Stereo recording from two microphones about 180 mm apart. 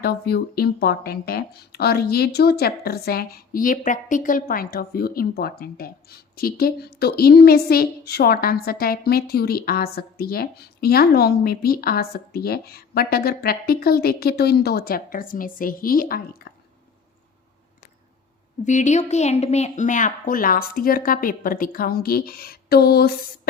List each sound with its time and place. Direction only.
0.0 s speech: 60° left (ahead or behind)
18.6 s a woman's voice: 40° left (ahead or behind); by 23.1 s 60° left (ahead or behind)